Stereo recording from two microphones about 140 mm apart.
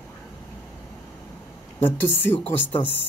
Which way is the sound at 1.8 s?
15° left (ahead or behind).